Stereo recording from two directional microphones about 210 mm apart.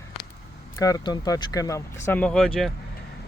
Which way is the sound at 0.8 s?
15° left (ahead or behind).